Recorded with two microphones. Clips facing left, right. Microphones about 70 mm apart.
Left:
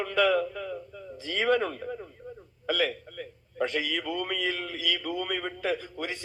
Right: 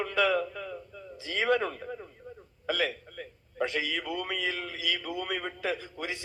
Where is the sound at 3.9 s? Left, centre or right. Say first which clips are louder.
Left 2 dB; centre.